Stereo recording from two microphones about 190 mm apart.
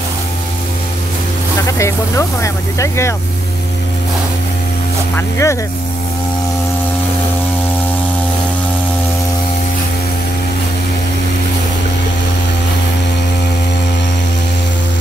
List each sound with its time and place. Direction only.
1.7 s speech: 15° left (ahead or behind)
5.1 s speech: 15° left (ahead or behind)